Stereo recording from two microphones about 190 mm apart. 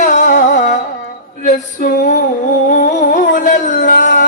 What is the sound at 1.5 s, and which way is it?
Female singing, 40° left (ahead or behind).